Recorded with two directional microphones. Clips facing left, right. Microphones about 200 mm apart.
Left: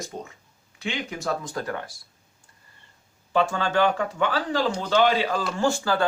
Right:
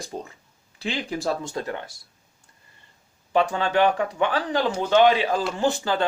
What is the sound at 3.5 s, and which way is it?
Speech, 15° right (ahead or behind).